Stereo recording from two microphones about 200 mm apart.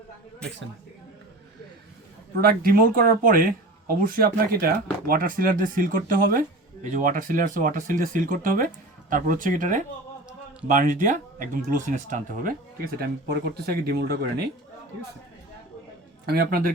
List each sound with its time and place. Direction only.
2.4 s speech: 45° right (ahead or behind)
16.2 s speech: 50° right (ahead or behind)